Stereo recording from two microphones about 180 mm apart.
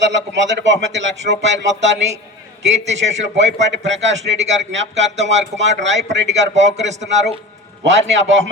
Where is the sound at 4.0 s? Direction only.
40° right (ahead or behind).